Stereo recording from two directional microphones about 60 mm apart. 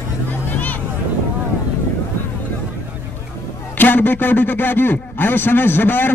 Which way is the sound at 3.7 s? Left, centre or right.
Left.